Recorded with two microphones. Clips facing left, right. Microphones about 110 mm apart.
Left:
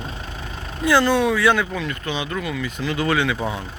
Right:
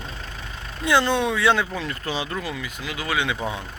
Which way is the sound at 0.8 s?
25° right (ahead or behind).